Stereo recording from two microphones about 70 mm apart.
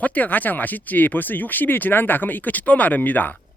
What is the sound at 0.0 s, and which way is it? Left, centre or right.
Speech, left.